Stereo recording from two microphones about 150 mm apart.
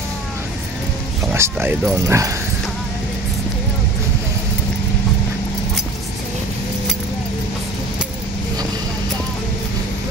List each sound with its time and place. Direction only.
1.3 s speech: 15° right (ahead or behind)